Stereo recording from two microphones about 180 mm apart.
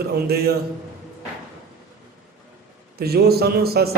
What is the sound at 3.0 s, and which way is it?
Speech, 60° right (ahead or behind).